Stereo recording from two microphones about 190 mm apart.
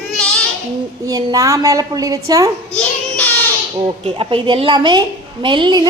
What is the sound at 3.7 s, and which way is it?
Speech, 25° right (ahead or behind).